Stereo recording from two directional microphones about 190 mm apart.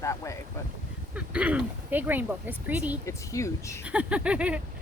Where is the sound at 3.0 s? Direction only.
15° left (ahead or behind).